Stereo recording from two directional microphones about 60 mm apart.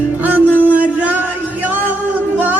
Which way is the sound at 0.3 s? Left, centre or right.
Right.